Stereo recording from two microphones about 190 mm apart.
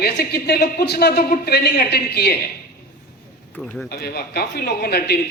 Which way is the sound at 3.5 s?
Centre (ahead or behind).